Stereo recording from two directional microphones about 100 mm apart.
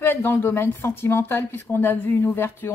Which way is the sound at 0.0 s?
20° left (ahead or behind).